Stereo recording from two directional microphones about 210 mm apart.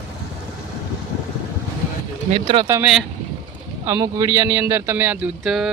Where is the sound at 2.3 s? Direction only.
25° right (ahead or behind).